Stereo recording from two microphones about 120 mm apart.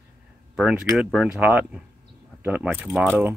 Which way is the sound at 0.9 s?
5° right (ahead or behind).